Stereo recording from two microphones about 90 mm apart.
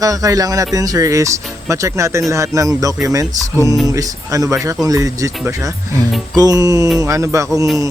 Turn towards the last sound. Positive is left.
turn(degrees=-35)  # may be behind; listen again after turning